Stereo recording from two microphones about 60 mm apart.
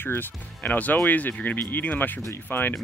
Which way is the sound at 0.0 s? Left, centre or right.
Left.